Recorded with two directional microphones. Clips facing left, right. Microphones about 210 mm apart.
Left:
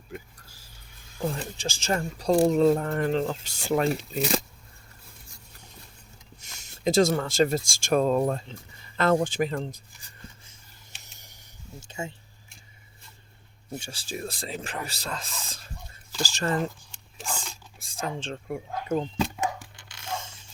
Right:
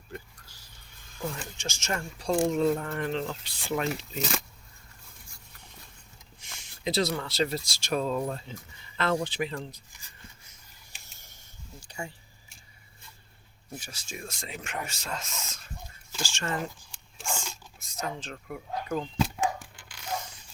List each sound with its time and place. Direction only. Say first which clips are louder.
1.2 s speech: left 5 dB; 35° left (ahead or behind)
6.4 s speech: left 6 dB; 45° left (ahead or behind)
11.2 s a sound: left 2 dB; 15° left (ahead or behind)
13.7 s speech: left 6 dB; 30° left (ahead or behind)
17.7 s speech: left 3 dB; 30° left (ahead or behind)
20.1 s zipper: even; 25° left (ahead or behind)